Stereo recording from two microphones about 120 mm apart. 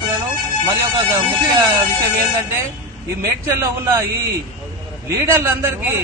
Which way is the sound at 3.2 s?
25° right (ahead or behind).